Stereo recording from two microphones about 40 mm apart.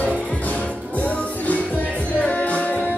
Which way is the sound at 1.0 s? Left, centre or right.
Left.